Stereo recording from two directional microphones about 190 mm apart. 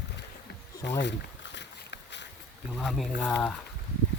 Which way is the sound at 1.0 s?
70° left (ahead or behind).